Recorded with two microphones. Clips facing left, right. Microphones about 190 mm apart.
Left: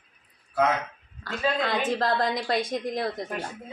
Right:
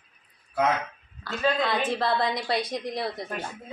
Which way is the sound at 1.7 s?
40° left (ahead or behind).